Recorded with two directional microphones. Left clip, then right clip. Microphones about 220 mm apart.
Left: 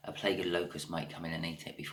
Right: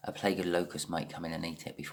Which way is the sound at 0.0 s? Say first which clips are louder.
Right 1 dB; 50° right (ahead or behind).